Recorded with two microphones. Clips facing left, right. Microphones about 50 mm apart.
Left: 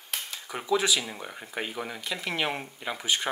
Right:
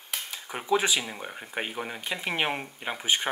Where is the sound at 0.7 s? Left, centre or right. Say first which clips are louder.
Right 1 dB; right.